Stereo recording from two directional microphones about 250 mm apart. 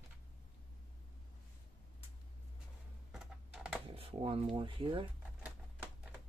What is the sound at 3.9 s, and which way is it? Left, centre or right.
Speech, right.